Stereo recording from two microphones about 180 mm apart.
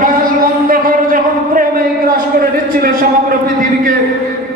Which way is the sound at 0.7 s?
50° right (ahead or behind).